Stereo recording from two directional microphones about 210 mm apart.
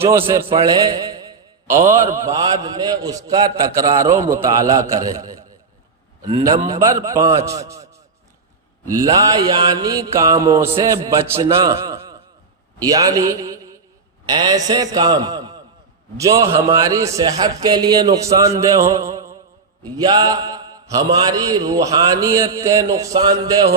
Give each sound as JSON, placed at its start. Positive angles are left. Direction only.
{"t": 0.0, "sound": "a man's voice", "side_deg": -10}
{"t": 9.0, "sound": "a man's voice", "side_deg": -15}